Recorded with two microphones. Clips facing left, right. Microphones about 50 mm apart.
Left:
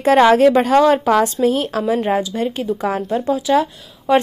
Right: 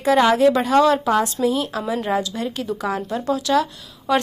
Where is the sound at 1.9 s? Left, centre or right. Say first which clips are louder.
Left 4 dB; left.